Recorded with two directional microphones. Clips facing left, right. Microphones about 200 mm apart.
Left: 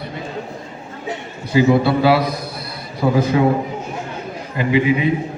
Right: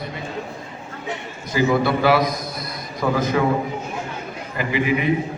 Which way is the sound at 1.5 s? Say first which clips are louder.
Left 5 dB; 30° left (ahead or behind).